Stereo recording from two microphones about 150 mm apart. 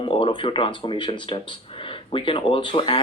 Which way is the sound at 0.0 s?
35° left (ahead or behind).